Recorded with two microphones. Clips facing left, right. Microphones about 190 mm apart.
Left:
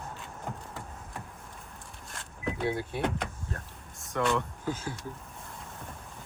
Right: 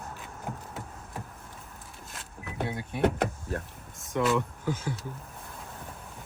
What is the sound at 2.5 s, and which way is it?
Speech, 55° right (ahead or behind).